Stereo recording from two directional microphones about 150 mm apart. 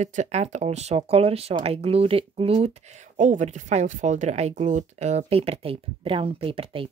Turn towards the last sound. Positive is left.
turn(degrees=-35)  # may be behind; listen again after turning